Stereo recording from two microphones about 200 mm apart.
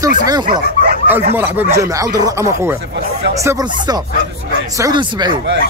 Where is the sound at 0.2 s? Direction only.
20° right (ahead or behind).